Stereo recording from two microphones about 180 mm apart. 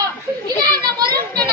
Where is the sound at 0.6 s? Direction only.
20° right (ahead or behind).